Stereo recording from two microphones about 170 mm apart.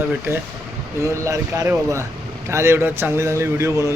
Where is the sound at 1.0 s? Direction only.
20° right (ahead or behind).